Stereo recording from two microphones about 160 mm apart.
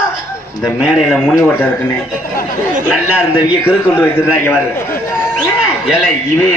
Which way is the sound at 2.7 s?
5° right (ahead or behind).